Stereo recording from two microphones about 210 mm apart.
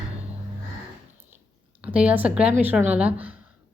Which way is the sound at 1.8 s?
5° right (ahead or behind).